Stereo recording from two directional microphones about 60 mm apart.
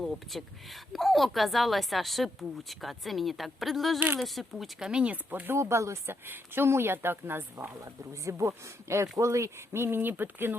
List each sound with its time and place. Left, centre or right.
0.0 s a woman's voice: centre
4.9 s speech: centre
5.1 s speech: right
5.5 s speech: right
6.2 s speech: right
7.9 s speech: right